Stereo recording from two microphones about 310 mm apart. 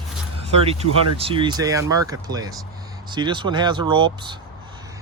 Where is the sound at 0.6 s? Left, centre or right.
Centre.